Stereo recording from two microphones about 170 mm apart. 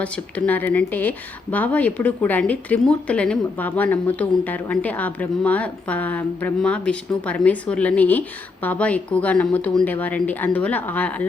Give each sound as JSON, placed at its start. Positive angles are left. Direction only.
{"t": 0.0, "sound": "speech", "side_deg": 10}